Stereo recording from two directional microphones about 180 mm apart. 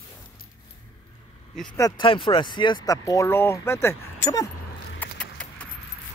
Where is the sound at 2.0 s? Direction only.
30° left (ahead or behind).